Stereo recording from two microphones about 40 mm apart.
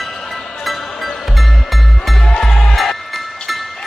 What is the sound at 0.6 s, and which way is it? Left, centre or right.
Music, centre.